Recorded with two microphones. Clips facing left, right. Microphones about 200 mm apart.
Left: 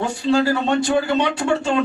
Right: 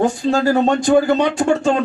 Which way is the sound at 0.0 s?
45° right (ahead or behind).